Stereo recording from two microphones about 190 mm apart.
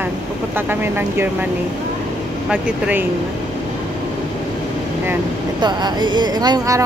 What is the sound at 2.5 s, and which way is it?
Speech, 5° right (ahead or behind).